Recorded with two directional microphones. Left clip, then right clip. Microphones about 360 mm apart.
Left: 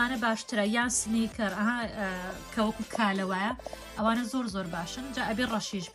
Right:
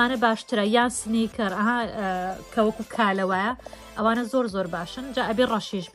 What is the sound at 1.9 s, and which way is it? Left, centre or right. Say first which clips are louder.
Speech: right 7 dB; right.